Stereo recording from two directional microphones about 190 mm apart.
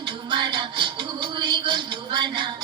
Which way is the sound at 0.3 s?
25° right (ahead or behind).